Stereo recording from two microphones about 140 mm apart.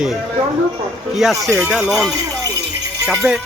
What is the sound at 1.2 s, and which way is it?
Speech, centre (ahead or behind).